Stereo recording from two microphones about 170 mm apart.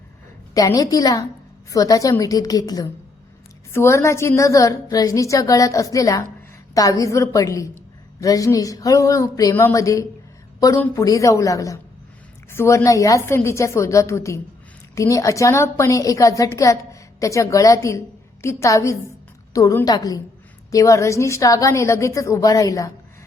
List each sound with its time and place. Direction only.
0.5 s a woman's voice: 20° left (ahead or behind)